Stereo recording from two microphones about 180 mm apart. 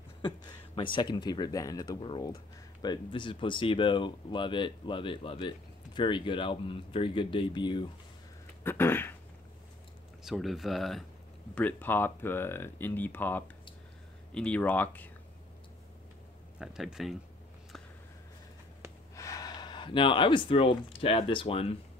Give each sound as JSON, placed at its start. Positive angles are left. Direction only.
{"t": 0.2, "sound": "speech", "side_deg": 25}
{"t": 8.6, "sound": "a sound", "side_deg": 15}
{"t": 10.2, "sound": "speech", "side_deg": 0}
{"t": 16.5, "sound": "speech", "side_deg": 0}
{"t": 19.1, "sound": "speech", "side_deg": 20}